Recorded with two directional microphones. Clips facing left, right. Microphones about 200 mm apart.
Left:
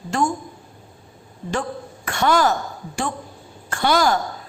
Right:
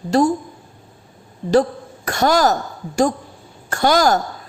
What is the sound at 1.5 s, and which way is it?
Speech, 40° right (ahead or behind).